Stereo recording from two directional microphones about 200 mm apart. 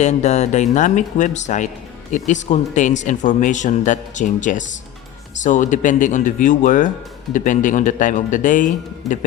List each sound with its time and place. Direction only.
0.0 s speech: 35° left (ahead or behind)